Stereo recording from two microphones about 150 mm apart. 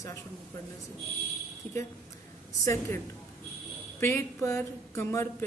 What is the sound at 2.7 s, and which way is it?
Speech, 15° left (ahead or behind).